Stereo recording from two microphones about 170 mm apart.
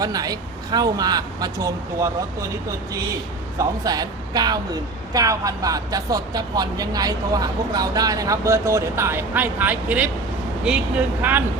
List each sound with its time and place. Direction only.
0.0 s a woman's voice: 20° right (ahead or behind)
3.6 s a woman's voice: 20° right (ahead or behind)